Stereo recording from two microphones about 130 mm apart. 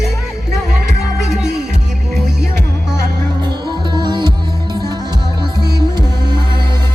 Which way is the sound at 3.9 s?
35° right (ahead or behind).